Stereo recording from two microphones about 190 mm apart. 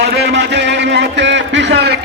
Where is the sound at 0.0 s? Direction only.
60° right (ahead or behind).